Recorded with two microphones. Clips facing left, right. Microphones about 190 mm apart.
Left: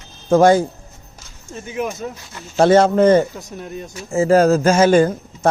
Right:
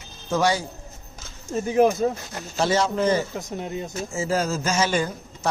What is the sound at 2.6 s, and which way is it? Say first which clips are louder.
Speech: left 10 dB; 55° left (ahead or behind).